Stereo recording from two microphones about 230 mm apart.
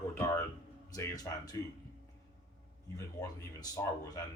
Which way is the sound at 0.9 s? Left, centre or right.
Centre.